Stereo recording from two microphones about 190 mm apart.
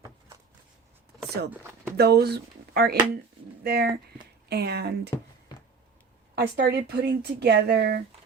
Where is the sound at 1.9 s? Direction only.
60° right (ahead or behind).